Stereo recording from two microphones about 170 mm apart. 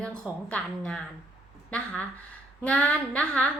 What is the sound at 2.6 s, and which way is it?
Speech, 10° left (ahead or behind).